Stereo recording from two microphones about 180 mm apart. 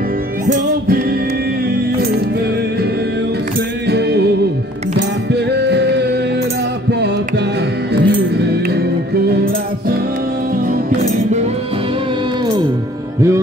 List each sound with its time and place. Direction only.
0.5 s music: 55° right (ahead or behind)
3.8 s music: 65° right (ahead or behind)